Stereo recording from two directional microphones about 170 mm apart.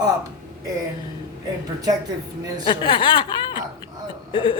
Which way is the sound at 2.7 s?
30° left (ahead or behind).